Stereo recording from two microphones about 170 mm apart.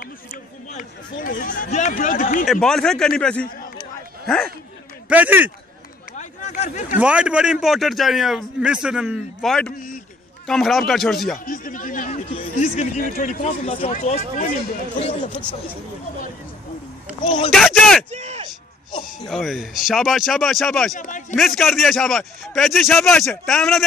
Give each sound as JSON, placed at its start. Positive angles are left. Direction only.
{"t": 0.0, "sound": "a sound", "side_deg": 50}
{"t": 2.4, "sound": "speech", "side_deg": 0}
{"t": 5.1, "sound": "a man's voice", "side_deg": -10}
{"t": 6.1, "sound": "a sound", "side_deg": 45}
{"t": 7.0, "sound": "speech", "side_deg": -5}
{"t": 11.3, "sound": "a sound", "side_deg": 55}
{"t": 13.1, "sound": "speech", "side_deg": 50}
{"t": 13.9, "sound": "speech", "side_deg": 45}
{"t": 17.5, "sound": "speech", "side_deg": 5}
{"t": 18.1, "sound": "speech", "side_deg": -40}
{"t": 19.2, "sound": "speech", "side_deg": 0}
{"t": 21.0, "sound": "speech", "side_deg": 50}
{"t": 21.4, "sound": "speech", "side_deg": 0}